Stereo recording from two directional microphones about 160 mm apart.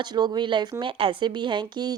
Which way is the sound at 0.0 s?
25° right (ahead or behind).